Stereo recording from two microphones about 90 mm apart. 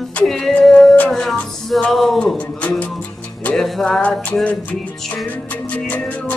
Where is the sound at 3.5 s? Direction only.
5° left (ahead or behind).